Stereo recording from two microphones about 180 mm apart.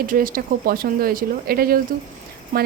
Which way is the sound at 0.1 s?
50° right (ahead or behind).